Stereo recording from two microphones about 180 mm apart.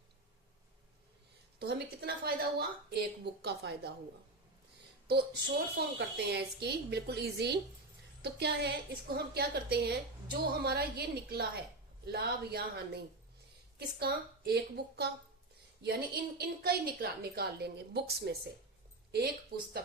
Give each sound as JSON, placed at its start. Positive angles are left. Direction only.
{"t": 1.6, "sound": "a woman's voice", "side_deg": -65}
{"t": 5.0, "sound": "a woman's voice", "side_deg": -65}
{"t": 16.4, "sound": "a woman's voice", "side_deg": -60}
{"t": 19.5, "sound": "a woman's voice", "side_deg": -60}